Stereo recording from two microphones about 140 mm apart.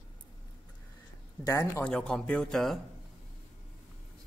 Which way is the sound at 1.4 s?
20° left (ahead or behind).